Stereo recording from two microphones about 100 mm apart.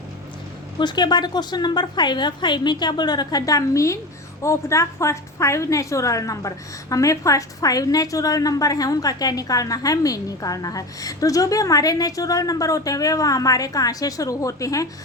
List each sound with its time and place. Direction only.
0.8 s a woman's voice: 45° left (ahead or behind)